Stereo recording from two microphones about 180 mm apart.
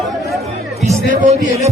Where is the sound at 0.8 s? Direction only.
40° right (ahead or behind).